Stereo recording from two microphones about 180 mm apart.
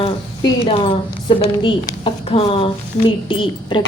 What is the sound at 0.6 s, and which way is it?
A woman's voice, 30° left (ahead or behind).